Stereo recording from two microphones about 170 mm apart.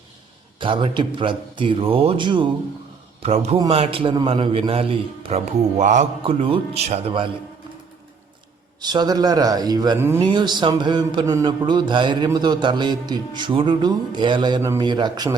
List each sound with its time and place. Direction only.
0.6 s speech: 30° right (ahead or behind)
3.2 s a man's voice: 40° right (ahead or behind)
6.2 s a man's voice: 35° right (ahead or behind)
8.8 s speech: 25° right (ahead or behind)
10.2 s speech: 25° right (ahead or behind)